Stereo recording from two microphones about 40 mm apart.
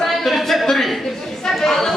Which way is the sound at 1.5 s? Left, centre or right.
Centre.